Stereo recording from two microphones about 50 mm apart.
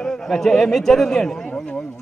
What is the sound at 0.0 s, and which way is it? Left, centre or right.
A man's voice, centre.